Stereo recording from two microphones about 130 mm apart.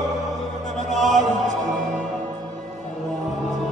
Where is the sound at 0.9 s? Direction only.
Centre (ahead or behind).